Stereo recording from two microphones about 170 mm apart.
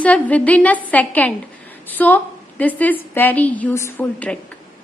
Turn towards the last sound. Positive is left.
turn(degrees=10)  # may be behind; listen again after turning